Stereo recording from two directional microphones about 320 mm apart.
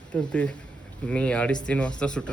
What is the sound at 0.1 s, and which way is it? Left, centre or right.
Speech, centre.